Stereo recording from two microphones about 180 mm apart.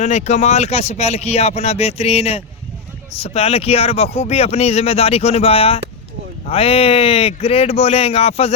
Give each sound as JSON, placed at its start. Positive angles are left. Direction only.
{"t": 0.0, "sound": "speech", "side_deg": 40}